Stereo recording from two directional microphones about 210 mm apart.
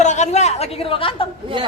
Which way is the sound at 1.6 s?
20° right (ahead or behind).